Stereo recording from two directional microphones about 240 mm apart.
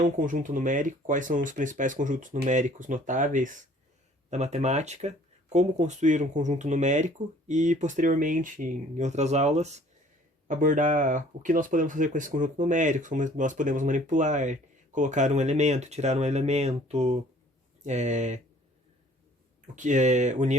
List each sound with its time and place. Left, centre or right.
0.0 s speech: right
19.7 s speech: right